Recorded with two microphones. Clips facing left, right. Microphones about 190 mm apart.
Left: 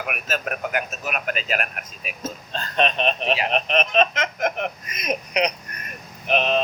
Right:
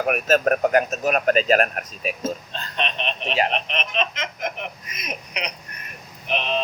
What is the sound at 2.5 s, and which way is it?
Speech, 45° left (ahead or behind).